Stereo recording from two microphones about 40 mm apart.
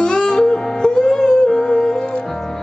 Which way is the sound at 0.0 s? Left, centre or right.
Centre.